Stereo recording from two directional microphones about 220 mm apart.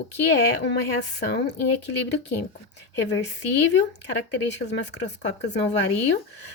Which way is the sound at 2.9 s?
55° left (ahead or behind).